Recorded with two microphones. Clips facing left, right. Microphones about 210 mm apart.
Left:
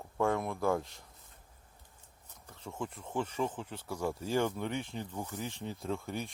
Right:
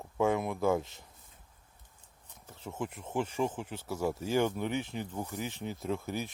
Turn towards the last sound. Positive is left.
turn(degrees=-5)  # may be behind; listen again after turning